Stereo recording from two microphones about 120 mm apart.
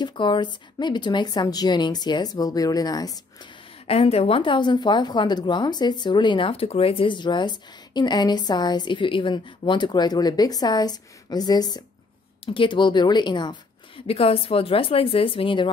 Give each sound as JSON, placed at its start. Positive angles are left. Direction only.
{"t": 0.0, "sound": "a woman's voice", "side_deg": 40}
{"t": 3.8, "sound": "a woman's voice", "side_deg": 55}